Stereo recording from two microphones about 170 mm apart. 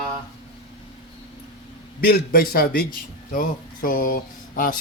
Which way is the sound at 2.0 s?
60° left (ahead or behind).